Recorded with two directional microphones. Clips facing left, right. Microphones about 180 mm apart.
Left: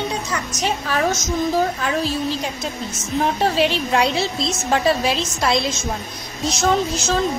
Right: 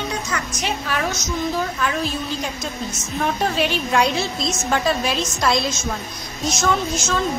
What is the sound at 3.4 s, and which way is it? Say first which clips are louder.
Speech: left 3 dB; 25° left (ahead or behind).